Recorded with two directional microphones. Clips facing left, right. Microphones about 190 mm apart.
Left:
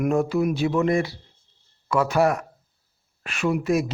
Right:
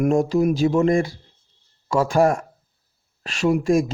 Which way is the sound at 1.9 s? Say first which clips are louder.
Right 2 dB; 30° right (ahead or behind).